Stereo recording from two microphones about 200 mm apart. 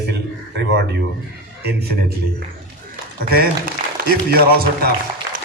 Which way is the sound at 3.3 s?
50° right (ahead or behind).